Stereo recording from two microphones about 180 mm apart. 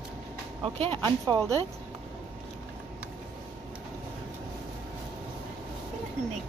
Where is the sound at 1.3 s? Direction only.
20° right (ahead or behind).